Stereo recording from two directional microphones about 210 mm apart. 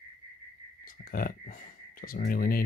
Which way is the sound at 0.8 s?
40° left (ahead or behind).